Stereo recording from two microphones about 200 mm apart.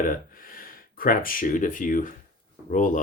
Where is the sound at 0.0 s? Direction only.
45° left (ahead or behind).